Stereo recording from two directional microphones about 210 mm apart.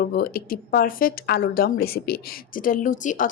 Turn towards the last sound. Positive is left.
turn(degrees=40)  # may be behind; listen again after turning